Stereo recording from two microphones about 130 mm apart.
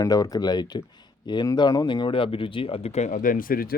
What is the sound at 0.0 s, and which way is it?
Speech, 30° left (ahead or behind).